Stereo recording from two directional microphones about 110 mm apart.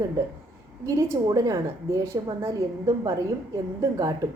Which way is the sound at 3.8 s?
30° right (ahead or behind).